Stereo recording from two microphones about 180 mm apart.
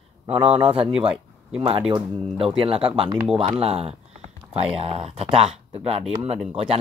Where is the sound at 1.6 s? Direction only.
30° right (ahead or behind).